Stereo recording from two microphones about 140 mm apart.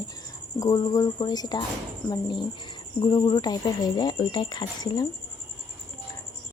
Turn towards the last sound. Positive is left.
turn(degrees=30)  # may be behind; listen again after turning